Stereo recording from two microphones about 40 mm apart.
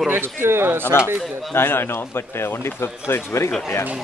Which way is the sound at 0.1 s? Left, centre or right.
Right.